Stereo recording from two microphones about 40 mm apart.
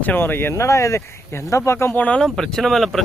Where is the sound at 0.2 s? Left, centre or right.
Left.